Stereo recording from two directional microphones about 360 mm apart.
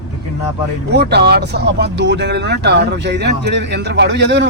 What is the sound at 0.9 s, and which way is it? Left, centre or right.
Speech, right.